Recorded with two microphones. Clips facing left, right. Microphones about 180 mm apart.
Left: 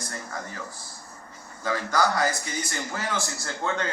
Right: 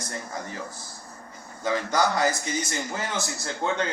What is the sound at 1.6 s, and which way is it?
A man's voice, 20° right (ahead or behind).